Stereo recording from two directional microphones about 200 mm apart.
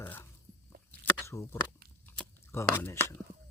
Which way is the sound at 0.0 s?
10° left (ahead or behind).